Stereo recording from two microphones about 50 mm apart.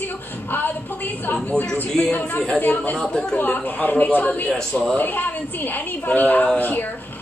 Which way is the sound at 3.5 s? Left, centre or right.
Left.